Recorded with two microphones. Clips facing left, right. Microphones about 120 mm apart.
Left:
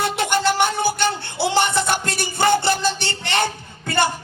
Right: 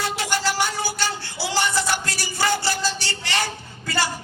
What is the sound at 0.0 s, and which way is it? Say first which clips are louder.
Music: left 5 dB; 55° left (ahead or behind).